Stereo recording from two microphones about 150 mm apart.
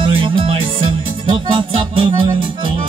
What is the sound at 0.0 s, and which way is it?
Music, 35° right (ahead or behind).